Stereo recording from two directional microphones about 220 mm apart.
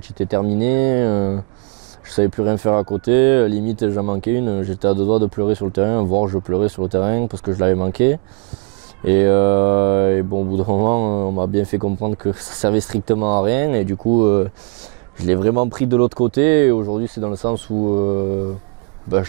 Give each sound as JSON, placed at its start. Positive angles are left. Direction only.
{"t": 0.3, "sound": "speech", "side_deg": -30}
{"t": 3.1, "sound": "speech", "side_deg": -15}
{"t": 3.8, "sound": "speech", "side_deg": -25}
{"t": 9.2, "sound": "speech", "side_deg": -20}
{"t": 13.5, "sound": "speech", "side_deg": -15}
{"t": 14.0, "sound": "speech", "side_deg": -25}
{"t": 16.3, "sound": "speech", "side_deg": -10}
{"t": 16.7, "sound": "speech", "side_deg": -25}